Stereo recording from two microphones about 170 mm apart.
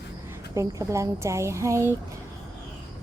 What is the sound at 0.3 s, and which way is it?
Speech, 15° right (ahead or behind).